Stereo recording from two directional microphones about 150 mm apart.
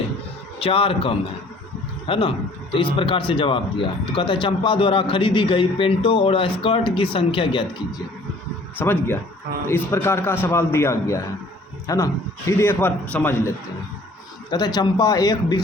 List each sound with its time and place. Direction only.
0.6 s speech: 35° left (ahead or behind)
8.8 s a man's voice: 15° left (ahead or behind)
14.5 s speech: 30° left (ahead or behind)